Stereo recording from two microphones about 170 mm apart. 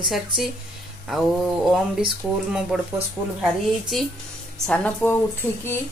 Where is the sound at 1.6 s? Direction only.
Centre (ahead or behind).